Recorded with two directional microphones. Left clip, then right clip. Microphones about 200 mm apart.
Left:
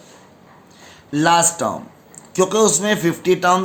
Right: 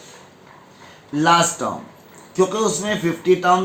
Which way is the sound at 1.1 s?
55° left (ahead or behind).